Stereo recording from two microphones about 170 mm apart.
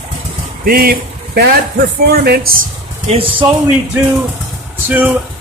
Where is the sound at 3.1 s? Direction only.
30° right (ahead or behind).